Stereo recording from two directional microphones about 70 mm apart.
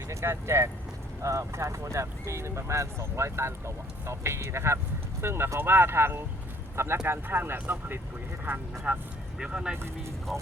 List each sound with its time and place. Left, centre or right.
0.1 s speech: right
8.9 s speech: centre
9.7 s speech: right